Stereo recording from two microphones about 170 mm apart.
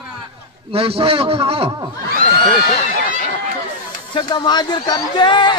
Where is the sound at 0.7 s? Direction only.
35° right (ahead or behind).